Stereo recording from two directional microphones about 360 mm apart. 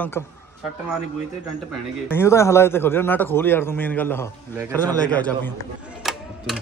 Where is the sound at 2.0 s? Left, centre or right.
Centre.